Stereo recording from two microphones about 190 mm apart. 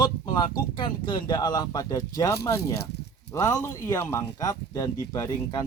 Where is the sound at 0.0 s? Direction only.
25° left (ahead or behind).